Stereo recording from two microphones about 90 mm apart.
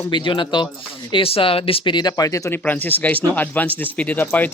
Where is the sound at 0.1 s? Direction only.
65° left (ahead or behind).